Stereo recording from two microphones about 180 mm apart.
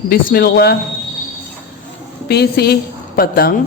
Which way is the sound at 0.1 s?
55° left (ahead or behind).